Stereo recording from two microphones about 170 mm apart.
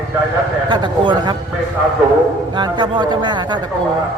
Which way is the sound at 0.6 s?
30° right (ahead or behind).